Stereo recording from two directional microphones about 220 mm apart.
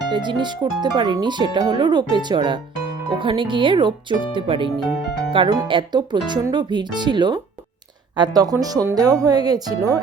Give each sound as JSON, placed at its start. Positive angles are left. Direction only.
{"t": 0.1, "sound": "speech", "side_deg": -20}